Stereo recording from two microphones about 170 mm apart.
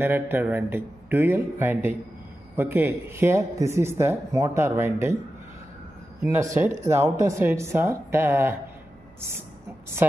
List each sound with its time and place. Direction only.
0.0 s speech: 10° right (ahead or behind)
6.2 s speech: 15° right (ahead or behind)